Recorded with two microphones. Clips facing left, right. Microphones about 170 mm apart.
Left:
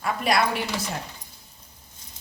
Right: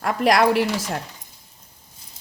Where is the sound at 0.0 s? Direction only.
80° right.